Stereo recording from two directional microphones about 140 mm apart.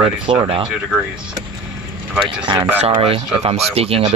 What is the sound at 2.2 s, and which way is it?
Speech, 35° right (ahead or behind).